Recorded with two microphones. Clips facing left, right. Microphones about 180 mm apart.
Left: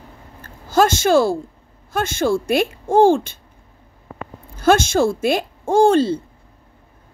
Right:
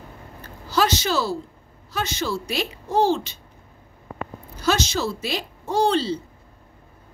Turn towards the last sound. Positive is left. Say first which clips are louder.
# left 7 dB
turn(degrees=50)  # may be behind; listen again after turning